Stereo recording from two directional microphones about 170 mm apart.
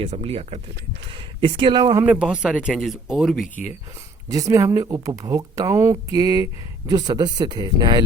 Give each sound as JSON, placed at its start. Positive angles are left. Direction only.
{"t": 0.0, "sound": "speech", "side_deg": -35}
{"t": 2.0, "sound": "speech", "side_deg": -5}
{"t": 3.4, "sound": "speech", "side_deg": 50}
{"t": 4.3, "sound": "speech", "side_deg": -20}